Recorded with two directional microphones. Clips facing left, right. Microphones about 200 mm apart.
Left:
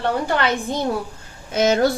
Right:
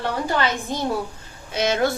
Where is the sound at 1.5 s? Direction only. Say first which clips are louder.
Left 4 dB; 45° left (ahead or behind).